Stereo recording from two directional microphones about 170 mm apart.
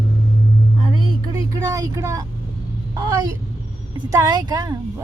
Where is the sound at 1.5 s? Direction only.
20° right (ahead or behind).